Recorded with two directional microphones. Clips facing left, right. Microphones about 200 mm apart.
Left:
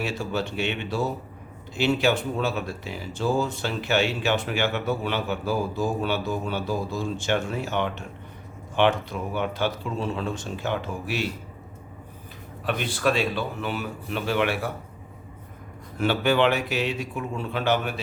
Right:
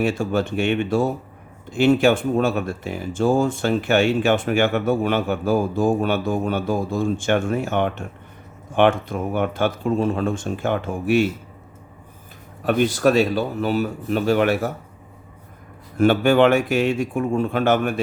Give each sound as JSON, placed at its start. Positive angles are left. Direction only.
{"t": 0.0, "sound": "speech", "side_deg": -50}
{"t": 12.6, "sound": "speech", "side_deg": -45}
{"t": 16.0, "sound": "speech", "side_deg": -50}